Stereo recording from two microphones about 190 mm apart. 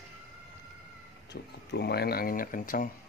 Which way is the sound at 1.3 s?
60° left (ahead or behind).